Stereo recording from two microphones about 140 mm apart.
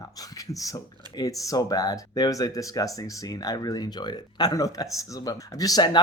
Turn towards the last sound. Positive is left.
turn(degrees=30)  # may be behind; listen again after turning